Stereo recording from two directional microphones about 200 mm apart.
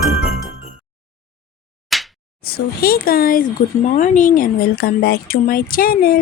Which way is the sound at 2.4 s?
50° left (ahead or behind).